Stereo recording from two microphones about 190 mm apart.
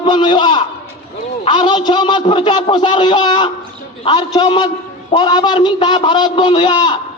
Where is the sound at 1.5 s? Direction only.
25° left (ahead or behind).